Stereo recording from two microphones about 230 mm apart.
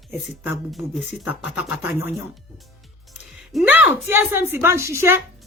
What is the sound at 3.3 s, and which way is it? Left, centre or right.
Speech, centre.